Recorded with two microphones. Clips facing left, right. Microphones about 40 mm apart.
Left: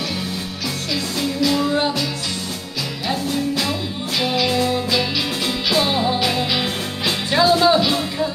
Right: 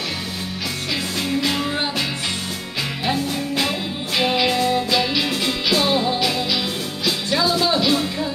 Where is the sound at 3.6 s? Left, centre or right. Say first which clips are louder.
Even; centre.